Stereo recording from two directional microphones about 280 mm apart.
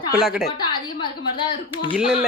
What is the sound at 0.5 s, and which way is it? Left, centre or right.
A woman's voice, centre.